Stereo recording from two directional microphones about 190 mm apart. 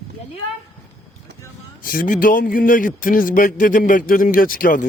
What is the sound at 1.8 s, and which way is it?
A man's voice, 50° left (ahead or behind).